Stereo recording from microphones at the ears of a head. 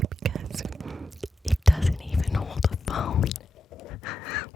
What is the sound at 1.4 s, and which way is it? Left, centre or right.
Whispering, centre.